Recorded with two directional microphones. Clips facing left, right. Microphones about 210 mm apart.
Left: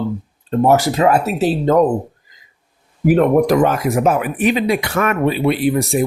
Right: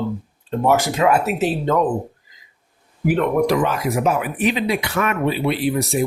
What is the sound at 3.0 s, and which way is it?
Speech, 45° left (ahead or behind).